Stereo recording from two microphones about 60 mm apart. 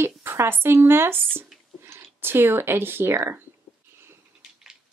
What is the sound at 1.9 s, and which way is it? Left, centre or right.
Speech, right.